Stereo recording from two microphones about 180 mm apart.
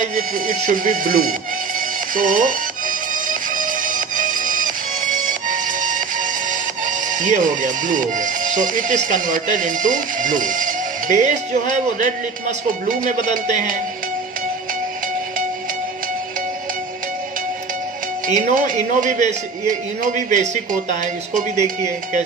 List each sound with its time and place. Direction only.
0.0 s speech: 50° right (ahead or behind)
2.1 s music: 50° right (ahead or behind)
18.3 s speech: 45° right (ahead or behind)